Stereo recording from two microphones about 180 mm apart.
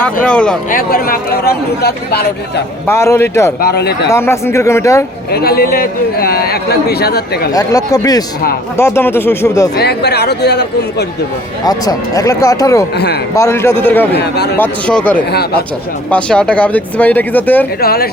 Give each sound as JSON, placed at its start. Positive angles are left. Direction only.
{"t": 0.0, "sound": "speech", "side_deg": 5}
{"t": 0.7, "sound": "a man's voice", "side_deg": 55}
{"t": 2.8, "sound": "speech", "side_deg": 15}
{"t": 3.6, "sound": "a man's voice", "side_deg": 65}
{"t": 4.1, "sound": "speech", "side_deg": 15}
{"t": 5.3, "sound": "a man's voice", "side_deg": 60}
{"t": 7.5, "sound": "speech", "side_deg": 20}
{"t": 9.7, "sound": "speech", "side_deg": 65}
{"t": 11.6, "sound": "speech", "side_deg": 20}
{"t": 14.2, "sound": "speech", "side_deg": 65}
{"t": 14.6, "sound": "speech", "side_deg": 5}
{"t": 15.3, "sound": "a man's voice", "side_deg": 60}
{"t": 16.0, "sound": "speech", "side_deg": 5}
{"t": 17.7, "sound": "a man's voice", "side_deg": 60}